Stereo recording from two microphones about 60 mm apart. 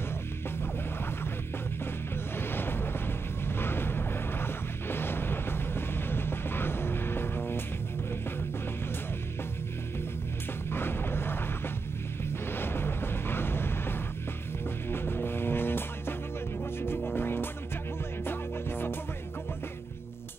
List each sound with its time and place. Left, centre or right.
2.3 s music: left
10.7 s a sound: left
14.9 s music: left